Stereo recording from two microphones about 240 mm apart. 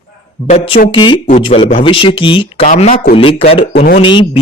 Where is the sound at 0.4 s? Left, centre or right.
Left.